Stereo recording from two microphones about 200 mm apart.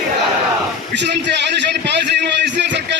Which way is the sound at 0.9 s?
60° right (ahead or behind).